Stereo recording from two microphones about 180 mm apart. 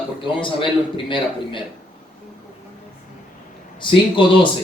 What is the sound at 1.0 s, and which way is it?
Speech, 25° left (ahead or behind).